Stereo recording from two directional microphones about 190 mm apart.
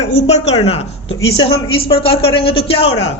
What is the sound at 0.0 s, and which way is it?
A woman's voice, 35° left (ahead or behind).